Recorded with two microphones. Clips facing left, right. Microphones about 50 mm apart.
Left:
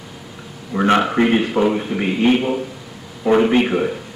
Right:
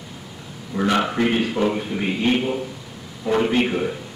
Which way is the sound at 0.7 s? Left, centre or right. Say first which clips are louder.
Left 5 dB; left.